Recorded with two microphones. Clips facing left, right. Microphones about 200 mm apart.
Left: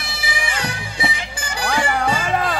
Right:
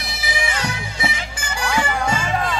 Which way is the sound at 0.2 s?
30° left (ahead or behind).